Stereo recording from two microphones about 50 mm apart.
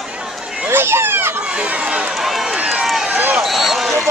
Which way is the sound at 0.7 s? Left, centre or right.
Right.